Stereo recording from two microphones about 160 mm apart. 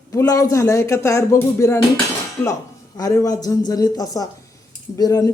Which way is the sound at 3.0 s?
20° left (ahead or behind).